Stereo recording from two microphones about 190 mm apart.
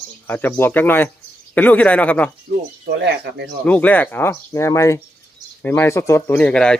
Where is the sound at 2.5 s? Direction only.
65° right (ahead or behind).